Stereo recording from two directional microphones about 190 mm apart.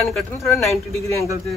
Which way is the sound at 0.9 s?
15° left (ahead or behind).